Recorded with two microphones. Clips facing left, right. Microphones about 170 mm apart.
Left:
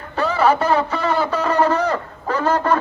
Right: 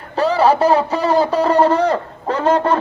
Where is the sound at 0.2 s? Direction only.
35° right (ahead or behind).